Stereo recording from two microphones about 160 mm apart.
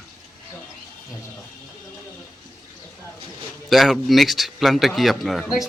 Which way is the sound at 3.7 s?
Centre (ahead or behind).